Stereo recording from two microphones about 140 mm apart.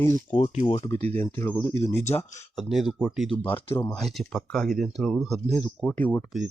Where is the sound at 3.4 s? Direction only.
15° left (ahead or behind).